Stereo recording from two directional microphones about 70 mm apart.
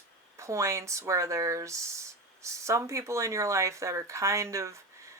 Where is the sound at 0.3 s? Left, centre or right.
Right.